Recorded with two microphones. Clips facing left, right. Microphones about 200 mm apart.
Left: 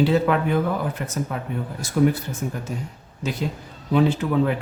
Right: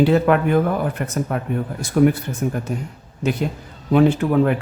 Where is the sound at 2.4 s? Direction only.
55° right (ahead or behind).